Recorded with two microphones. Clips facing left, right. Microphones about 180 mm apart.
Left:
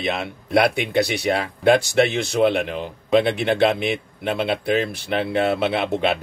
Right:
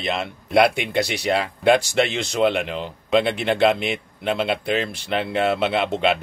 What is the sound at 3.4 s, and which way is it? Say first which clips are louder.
Speech: even; 55° left (ahead or behind).